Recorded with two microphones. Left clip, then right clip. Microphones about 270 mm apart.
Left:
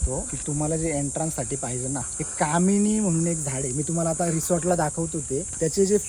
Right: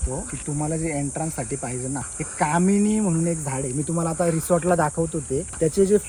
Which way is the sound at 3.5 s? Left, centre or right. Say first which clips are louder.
Right 2 dB; centre.